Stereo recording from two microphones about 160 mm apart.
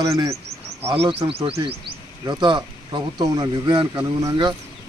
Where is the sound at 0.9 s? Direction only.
35° right (ahead or behind).